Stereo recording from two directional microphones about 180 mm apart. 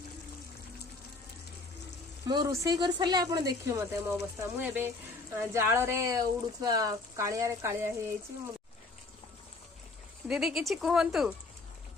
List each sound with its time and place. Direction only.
2.2 s speech: 20° right (ahead or behind)
10.2 s speech: centre (ahead or behind)